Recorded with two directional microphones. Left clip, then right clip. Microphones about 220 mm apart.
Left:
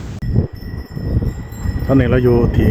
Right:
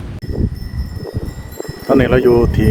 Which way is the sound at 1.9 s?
40° right (ahead or behind).